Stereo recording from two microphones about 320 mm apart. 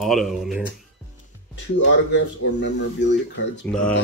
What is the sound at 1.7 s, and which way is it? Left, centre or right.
Speech, left.